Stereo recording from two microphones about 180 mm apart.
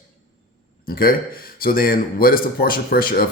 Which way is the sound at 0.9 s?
55° left (ahead or behind).